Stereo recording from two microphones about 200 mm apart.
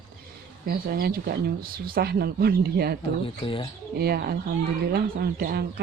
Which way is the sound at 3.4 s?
25° left (ahead or behind).